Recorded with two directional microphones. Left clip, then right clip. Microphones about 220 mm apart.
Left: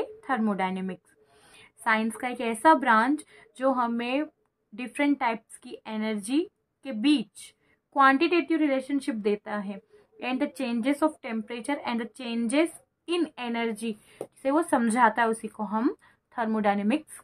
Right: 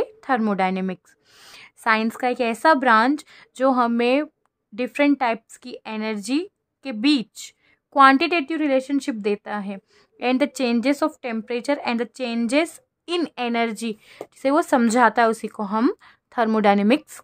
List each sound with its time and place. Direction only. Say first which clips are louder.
0.0 s a woman's voice: right 6 dB; 40° right (ahead or behind)